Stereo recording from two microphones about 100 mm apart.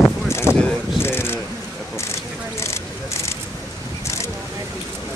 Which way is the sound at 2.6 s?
30° left (ahead or behind).